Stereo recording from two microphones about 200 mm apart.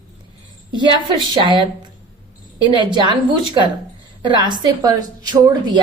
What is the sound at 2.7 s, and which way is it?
A woman's voice, 25° right (ahead or behind).